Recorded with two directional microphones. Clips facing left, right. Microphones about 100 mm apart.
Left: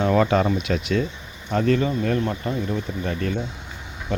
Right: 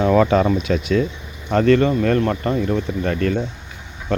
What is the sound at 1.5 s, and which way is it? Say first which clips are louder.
Speech: right 6 dB; 90° right.